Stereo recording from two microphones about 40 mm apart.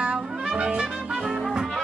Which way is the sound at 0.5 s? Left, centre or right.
Right.